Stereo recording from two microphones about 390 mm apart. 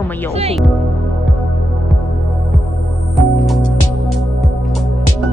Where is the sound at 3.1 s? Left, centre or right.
Centre.